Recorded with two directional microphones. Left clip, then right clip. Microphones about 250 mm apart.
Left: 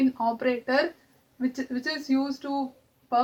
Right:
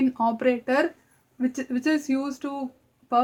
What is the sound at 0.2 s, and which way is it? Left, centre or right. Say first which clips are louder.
Speech: right 3 dB; right.